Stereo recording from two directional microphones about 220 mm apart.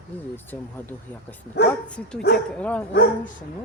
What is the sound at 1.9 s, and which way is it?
Speech, 5° left (ahead or behind).